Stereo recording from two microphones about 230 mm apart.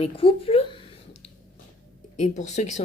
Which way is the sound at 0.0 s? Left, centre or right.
Left.